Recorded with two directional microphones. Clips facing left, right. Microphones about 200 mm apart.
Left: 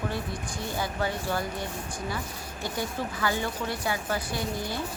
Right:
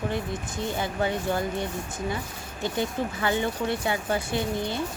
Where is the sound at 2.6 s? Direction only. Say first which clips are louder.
Right 4 dB; 20° right (ahead or behind).